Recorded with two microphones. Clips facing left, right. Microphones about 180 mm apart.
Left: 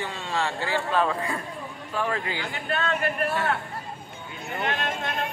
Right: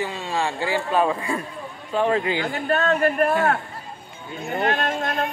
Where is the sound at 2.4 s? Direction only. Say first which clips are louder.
Right 7 dB; 45° right (ahead or behind).